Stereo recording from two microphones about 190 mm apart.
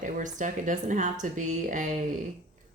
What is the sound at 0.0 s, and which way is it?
Speech, 40° right (ahead or behind).